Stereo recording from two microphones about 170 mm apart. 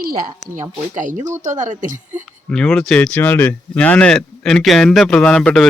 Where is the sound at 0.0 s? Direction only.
60° right (ahead or behind).